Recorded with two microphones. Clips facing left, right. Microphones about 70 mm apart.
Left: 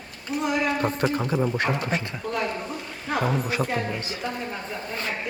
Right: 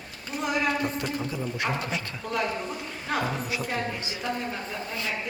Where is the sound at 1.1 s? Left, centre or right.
Left.